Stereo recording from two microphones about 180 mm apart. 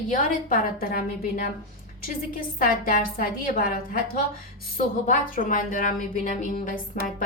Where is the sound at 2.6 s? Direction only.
50° left (ahead or behind).